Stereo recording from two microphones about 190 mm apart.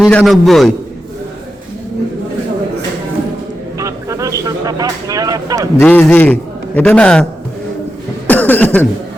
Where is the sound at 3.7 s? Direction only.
15° right (ahead or behind).